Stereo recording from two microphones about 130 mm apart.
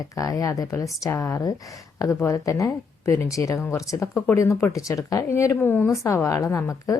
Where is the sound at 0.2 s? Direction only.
25° left (ahead or behind).